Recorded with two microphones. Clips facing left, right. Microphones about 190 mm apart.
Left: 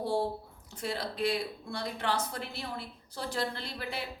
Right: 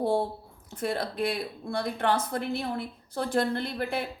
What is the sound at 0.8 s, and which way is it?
Speech, 55° right (ahead or behind).